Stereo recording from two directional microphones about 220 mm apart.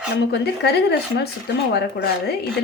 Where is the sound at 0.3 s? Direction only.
50° left (ahead or behind).